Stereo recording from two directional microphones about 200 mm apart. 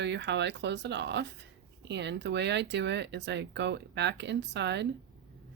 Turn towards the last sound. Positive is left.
turn(degrees=-60)  # may be behind; listen again after turning